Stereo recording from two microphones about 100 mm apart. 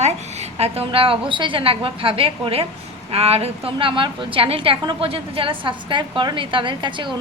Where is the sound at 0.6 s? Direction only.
80° right.